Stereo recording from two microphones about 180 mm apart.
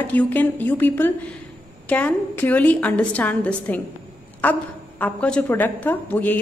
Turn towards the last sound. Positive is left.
turn(degrees=10)  # may be behind; listen again after turning